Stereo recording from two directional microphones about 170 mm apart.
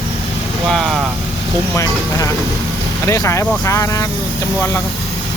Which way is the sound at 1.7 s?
20° left (ahead or behind).